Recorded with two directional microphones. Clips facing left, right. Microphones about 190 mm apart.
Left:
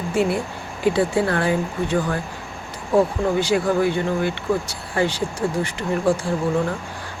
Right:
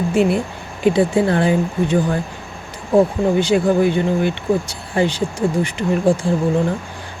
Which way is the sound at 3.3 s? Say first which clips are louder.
Right 4 dB; 20° right (ahead or behind).